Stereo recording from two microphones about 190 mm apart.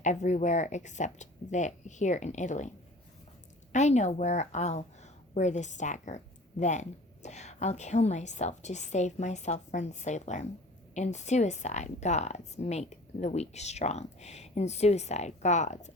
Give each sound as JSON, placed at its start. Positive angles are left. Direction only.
{"t": 0.0, "sound": "speech", "side_deg": 40}